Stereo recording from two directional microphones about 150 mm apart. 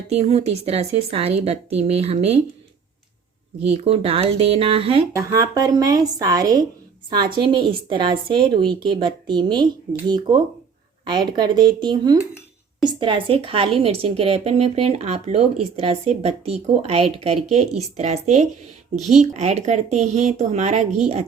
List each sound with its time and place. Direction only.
0.1 s speech: 45° right (ahead or behind)
3.7 s a woman's voice: 40° right (ahead or behind)
5.1 s a woman's voice: 20° right (ahead or behind); by 21.2 s 45° right (ahead or behind)